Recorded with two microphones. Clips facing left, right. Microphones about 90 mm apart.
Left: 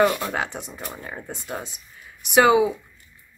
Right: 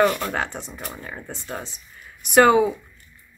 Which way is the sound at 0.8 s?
20° left (ahead or behind).